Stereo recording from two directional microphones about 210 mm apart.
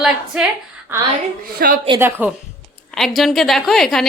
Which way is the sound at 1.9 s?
10° right (ahead or behind).